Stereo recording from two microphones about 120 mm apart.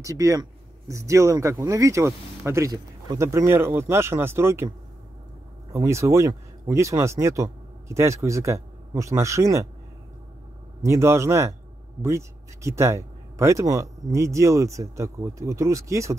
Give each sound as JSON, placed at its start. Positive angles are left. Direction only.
{"t": 0.0, "sound": "speech", "side_deg": -25}
{"t": 5.7, "sound": "speech", "side_deg": -25}
{"t": 10.8, "sound": "speech", "side_deg": -25}